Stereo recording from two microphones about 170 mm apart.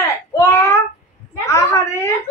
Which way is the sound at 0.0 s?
20° left (ahead or behind).